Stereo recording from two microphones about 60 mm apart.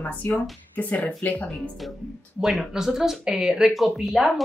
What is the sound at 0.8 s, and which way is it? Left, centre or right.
Speech, left.